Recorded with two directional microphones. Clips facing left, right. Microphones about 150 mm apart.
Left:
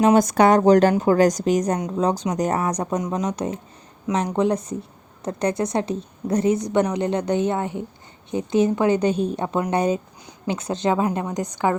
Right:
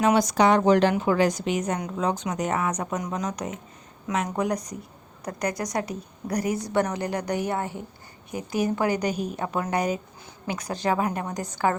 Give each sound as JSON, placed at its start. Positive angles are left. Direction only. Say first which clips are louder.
{"t": 0.2, "sound": "a woman's voice", "louder": "left 4 dB", "side_deg": 50}
{"t": 2.8, "sound": "a woman's voice", "louder": "left 5 dB", "side_deg": 25}